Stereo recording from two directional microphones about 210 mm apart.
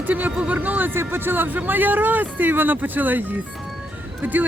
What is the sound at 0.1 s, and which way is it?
Speech, 5° right (ahead or behind).